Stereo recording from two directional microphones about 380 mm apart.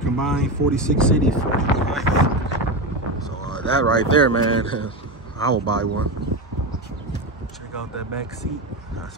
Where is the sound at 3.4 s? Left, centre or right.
Centre.